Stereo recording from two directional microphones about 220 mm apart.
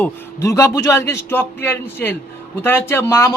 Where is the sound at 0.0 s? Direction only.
15° left (ahead or behind).